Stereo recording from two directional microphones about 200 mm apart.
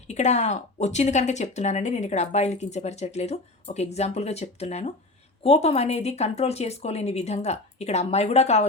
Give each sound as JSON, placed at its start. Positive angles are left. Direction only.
{"t": 0.1, "sound": "speech", "side_deg": 35}